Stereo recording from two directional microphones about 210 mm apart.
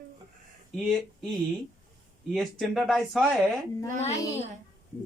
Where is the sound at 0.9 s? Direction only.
Centre (ahead or behind).